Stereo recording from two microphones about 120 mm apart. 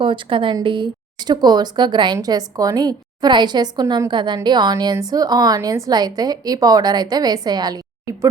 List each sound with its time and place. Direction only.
0.0 s a woman's voice: 45° right (ahead or behind); by 8.3 s 30° right (ahead or behind)